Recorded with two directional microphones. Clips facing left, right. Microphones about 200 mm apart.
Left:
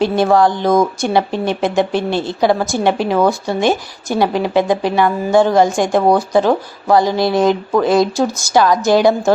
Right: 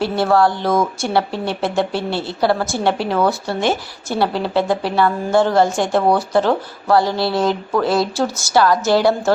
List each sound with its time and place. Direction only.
0.0 s speech: 15° left (ahead or behind)